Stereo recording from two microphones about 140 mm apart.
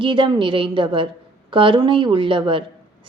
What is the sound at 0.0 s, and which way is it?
A woman's voice, 35° right (ahead or behind).